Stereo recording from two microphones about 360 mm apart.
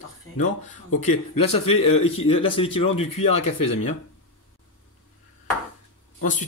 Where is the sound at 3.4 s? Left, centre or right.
Left.